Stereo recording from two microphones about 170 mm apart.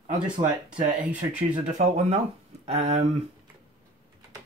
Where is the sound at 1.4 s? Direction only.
40° right (ahead or behind).